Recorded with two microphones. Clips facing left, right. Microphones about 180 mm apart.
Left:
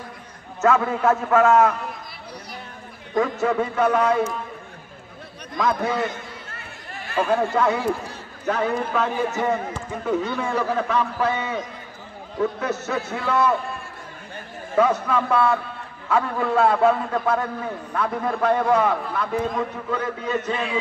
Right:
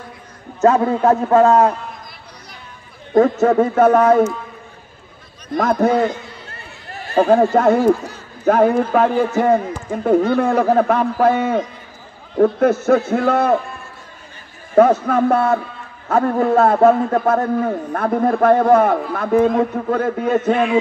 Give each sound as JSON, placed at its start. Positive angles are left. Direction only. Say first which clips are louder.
{"t": 0.6, "sound": "a man's voice", "louder": "right 6 dB", "side_deg": -35}
{"t": 3.1, "sound": "a man's voice", "louder": "right 8 dB", "side_deg": -35}
{"t": 5.6, "sound": "a man's voice", "louder": "right 7 dB", "side_deg": -45}
{"t": 7.2, "sound": "a man's voice", "louder": "right 8 dB", "side_deg": -40}
{"t": 14.8, "sound": "a man's voice", "louder": "right 7 dB", "side_deg": -50}